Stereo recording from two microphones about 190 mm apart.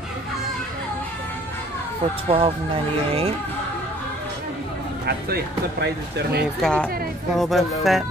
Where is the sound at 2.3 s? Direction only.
30° right (ahead or behind).